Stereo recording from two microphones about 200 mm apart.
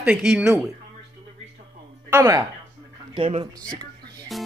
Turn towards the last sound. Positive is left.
turn(degrees=0)  # may be behind; listen again after turning